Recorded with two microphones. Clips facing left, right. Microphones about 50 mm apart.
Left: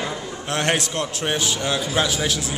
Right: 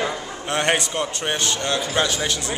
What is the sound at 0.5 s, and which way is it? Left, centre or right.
A man's voice, centre.